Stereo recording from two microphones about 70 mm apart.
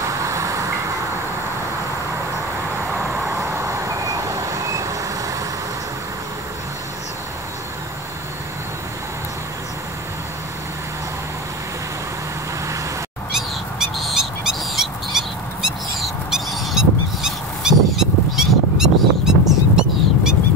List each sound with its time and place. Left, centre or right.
0.3 s vehicle: right
3.3 s vehicle: right
13.7 s bird: centre